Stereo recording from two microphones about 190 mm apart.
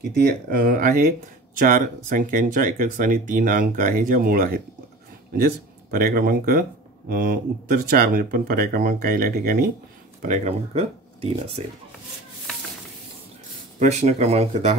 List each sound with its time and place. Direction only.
0.2 s speech: 50° right (ahead or behind)
10.2 s speech: 40° right (ahead or behind)
13.7 s speech: 35° right (ahead or behind)